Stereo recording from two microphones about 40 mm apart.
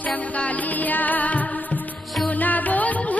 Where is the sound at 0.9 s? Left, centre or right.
Left.